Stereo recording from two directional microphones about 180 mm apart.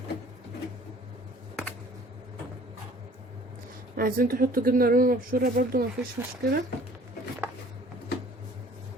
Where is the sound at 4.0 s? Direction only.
55° right (ahead or behind).